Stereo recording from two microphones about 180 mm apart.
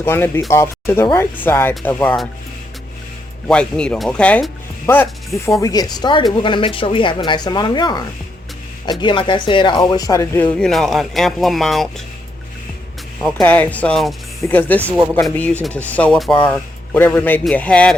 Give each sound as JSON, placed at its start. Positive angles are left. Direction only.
{"t": 0.0, "sound": "speech", "side_deg": 15}
{"t": 3.4, "sound": "speech", "side_deg": 5}
{"t": 5.5, "sound": "a woman's voice", "side_deg": 20}
{"t": 13.2, "sound": "speech", "side_deg": 5}
{"t": 15.9, "sound": "speech", "side_deg": 5}